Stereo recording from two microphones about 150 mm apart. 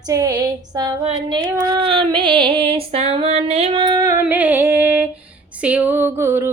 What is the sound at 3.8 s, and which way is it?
Female singing, 25° right (ahead or behind).